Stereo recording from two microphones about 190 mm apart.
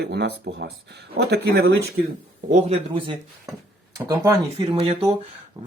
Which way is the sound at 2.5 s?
30° right (ahead or behind).